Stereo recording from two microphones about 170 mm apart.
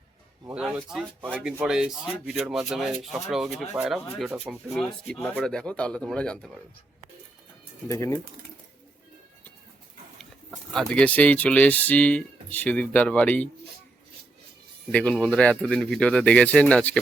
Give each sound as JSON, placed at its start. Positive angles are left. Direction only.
{"t": 0.4, "sound": "speech", "side_deg": -5}
{"t": 7.9, "sound": "speech", "side_deg": 15}
{"t": 10.2, "sound": "speech", "side_deg": 0}
{"t": 14.9, "sound": "speech", "side_deg": 5}